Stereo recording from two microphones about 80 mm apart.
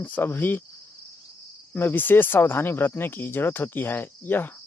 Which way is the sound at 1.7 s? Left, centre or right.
Left.